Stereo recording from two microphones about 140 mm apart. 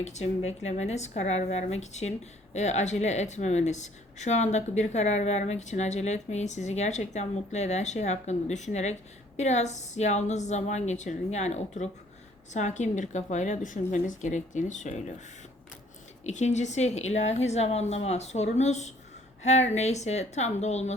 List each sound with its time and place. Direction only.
0.0 s a woman's voice: 55° left (ahead or behind)
16.2 s a woman's voice: 55° left (ahead or behind)